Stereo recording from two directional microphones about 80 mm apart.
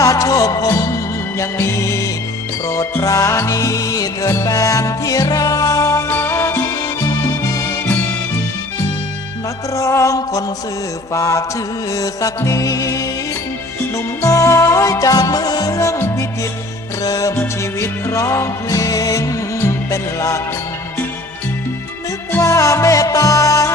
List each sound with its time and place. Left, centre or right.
0.0 s music: left
9.7 s music: left
15.7 s music: left
17.0 s music: left
17.6 s music: left
22.4 s music: left